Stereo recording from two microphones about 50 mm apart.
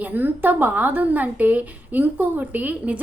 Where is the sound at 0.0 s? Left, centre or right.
Right.